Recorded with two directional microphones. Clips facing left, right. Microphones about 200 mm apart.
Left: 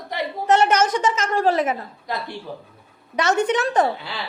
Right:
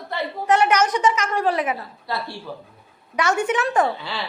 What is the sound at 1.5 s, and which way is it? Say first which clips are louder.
Speech: left 4 dB; 45° left (ahead or behind).